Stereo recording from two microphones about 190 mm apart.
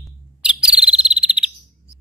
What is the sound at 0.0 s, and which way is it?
Bird vocalization, 5° right (ahead or behind).